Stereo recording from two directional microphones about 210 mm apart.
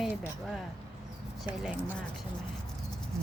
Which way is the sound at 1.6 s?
5° right (ahead or behind).